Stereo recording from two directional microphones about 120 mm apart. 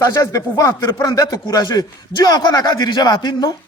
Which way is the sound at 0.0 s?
25° left (ahead or behind).